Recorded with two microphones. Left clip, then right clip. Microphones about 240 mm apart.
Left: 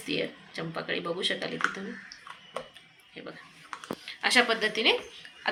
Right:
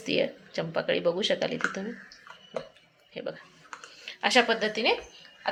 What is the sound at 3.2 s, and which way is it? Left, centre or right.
Speech, right.